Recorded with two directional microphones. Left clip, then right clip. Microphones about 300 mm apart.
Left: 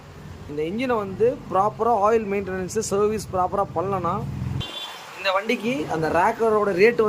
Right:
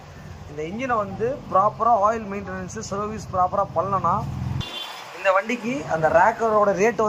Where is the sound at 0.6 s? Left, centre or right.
Centre.